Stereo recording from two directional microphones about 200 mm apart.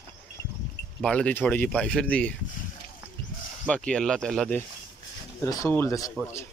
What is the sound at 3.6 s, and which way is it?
Speech, 5° left (ahead or behind).